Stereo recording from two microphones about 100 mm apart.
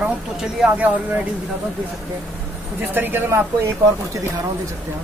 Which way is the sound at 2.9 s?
20° right (ahead or behind).